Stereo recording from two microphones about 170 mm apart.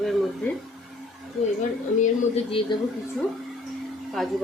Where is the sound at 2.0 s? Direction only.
35° left (ahead or behind).